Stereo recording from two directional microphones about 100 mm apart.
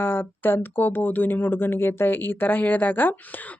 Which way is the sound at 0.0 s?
20° left (ahead or behind).